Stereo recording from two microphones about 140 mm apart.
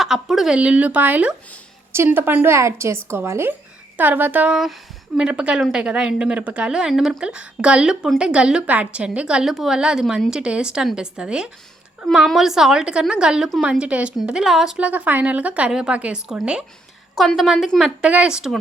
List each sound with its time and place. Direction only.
0.0 s a woman's voice: centre (ahead or behind)